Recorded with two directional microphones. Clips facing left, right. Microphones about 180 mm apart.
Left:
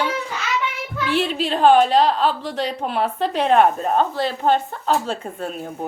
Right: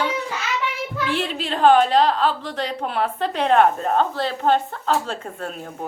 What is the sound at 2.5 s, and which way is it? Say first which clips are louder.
A woman's voice: left 2 dB; 25° left (ahead or behind).